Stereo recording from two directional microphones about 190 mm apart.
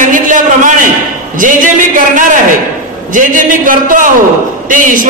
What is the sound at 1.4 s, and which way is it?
A man's voice, 45° right (ahead or behind).